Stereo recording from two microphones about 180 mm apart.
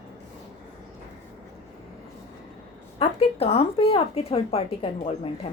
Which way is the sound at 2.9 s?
35° left (ahead or behind).